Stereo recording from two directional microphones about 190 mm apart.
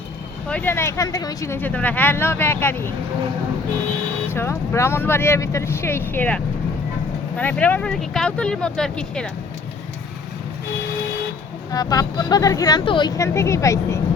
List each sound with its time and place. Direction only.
0.5 s speech: 10° left (ahead or behind)
4.3 s speech: 15° left (ahead or behind)
11.7 s speech: 20° left (ahead or behind)